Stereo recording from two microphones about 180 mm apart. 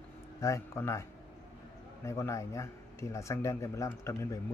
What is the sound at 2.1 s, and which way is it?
Speech, 15° left (ahead or behind).